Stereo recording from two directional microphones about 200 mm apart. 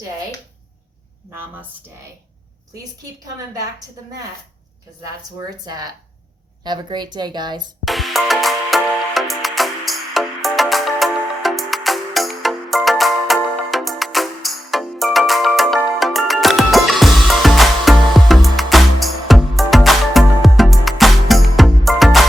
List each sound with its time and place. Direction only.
5.6 s a woman's voice: 20° right (ahead or behind)
7.9 s music: centre (ahead or behind)